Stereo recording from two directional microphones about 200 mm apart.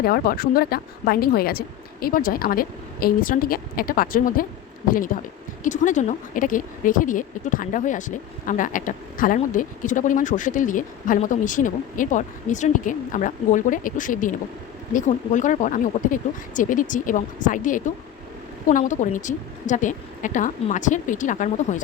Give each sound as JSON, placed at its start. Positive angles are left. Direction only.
{"t": 0.0, "sound": "a woman's voice", "side_deg": 50}